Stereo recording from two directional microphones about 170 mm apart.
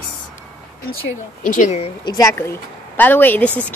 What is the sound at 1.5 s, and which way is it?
Child singing, 45° left (ahead or behind).